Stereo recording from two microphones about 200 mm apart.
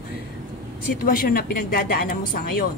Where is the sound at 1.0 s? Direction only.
45° left (ahead or behind).